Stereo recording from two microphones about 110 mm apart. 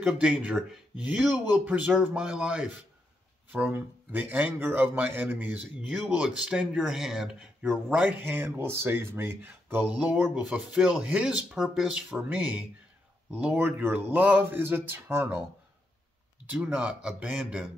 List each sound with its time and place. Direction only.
0.0 s a man's voice: 10° right (ahead or behind)
10.4 s a man's voice: 5° right (ahead or behind)
13.3 s speech: 15° right (ahead or behind)
16.6 s a man's voice: 10° right (ahead or behind)